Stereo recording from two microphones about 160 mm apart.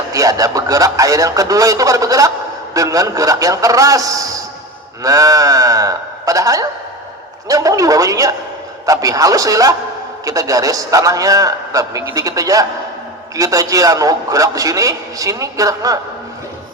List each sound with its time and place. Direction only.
0.1 s a man's voice: 20° right (ahead or behind)